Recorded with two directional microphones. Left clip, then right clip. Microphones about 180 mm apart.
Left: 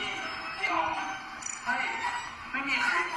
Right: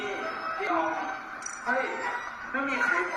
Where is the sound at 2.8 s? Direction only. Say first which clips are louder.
Right 3 dB; 40° right (ahead or behind).